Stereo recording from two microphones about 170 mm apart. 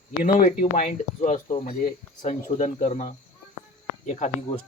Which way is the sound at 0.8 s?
45° left (ahead or behind).